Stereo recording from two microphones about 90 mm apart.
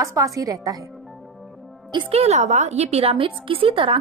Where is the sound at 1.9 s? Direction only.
60° right (ahead or behind).